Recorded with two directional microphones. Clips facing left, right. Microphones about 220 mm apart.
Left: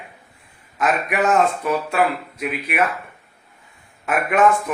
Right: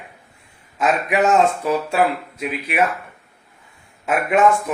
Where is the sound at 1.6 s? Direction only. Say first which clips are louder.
Right 1 dB; 25° right (ahead or behind).